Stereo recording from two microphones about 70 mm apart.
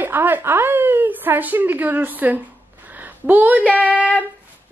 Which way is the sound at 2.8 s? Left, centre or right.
Right.